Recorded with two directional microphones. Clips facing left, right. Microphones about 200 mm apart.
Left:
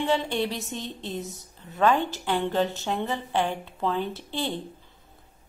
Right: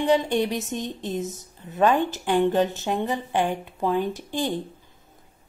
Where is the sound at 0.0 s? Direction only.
15° right (ahead or behind).